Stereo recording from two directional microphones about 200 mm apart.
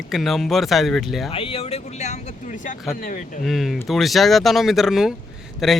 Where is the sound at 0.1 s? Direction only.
Centre (ahead or behind).